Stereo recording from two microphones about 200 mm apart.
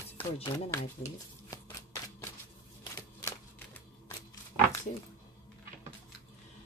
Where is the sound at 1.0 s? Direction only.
35° left (ahead or behind).